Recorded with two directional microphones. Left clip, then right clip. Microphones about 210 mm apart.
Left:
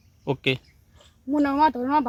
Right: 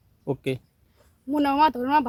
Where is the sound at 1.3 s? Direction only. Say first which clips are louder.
Even; 30° right (ahead or behind).